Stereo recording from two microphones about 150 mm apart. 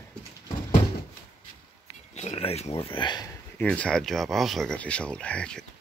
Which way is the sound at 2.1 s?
45° left (ahead or behind).